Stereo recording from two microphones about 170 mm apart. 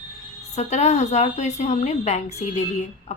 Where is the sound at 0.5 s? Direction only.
40° left (ahead or behind).